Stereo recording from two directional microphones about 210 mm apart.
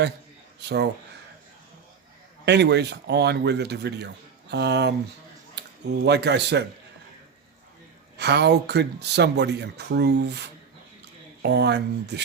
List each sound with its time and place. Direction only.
2.4 s speech: 55° right (ahead or behind)
8.2 s speech: 50° right (ahead or behind)
11.4 s speech: 50° right (ahead or behind)